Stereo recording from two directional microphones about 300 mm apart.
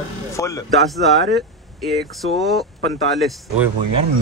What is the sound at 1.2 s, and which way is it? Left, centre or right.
Speech, right.